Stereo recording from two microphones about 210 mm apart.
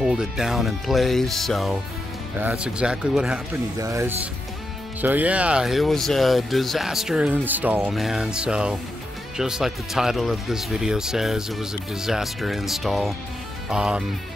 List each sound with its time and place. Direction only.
0.0 s speech: centre (ahead or behind)
3.5 s speech: 15° right (ahead or behind)